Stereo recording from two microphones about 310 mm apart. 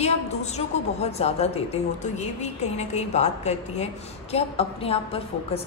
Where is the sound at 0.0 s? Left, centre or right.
Left.